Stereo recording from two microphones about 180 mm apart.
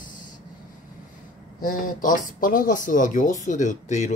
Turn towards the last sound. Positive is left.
turn(degrees=40)  # may be behind; listen again after turning